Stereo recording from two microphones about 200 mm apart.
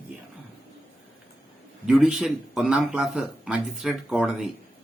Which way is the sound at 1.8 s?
5° right (ahead or behind).